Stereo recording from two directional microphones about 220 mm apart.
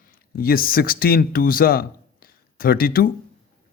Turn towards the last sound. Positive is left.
turn(degrees=40)  # may be behind; listen again after turning